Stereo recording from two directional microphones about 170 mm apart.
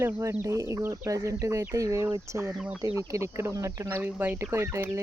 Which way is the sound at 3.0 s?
15° right (ahead or behind).